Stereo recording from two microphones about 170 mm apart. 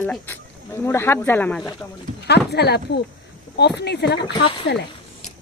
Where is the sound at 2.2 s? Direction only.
80° left.